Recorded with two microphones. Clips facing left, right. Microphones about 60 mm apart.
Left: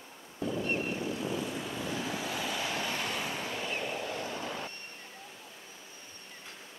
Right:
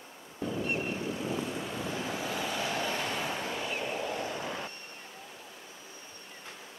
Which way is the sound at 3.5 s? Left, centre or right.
Centre.